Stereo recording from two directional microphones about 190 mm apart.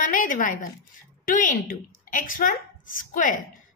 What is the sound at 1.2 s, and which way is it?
A woman's voice, 45° left (ahead or behind).